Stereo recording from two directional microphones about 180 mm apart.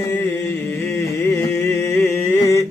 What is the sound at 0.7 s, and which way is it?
Music, 10° left (ahead or behind).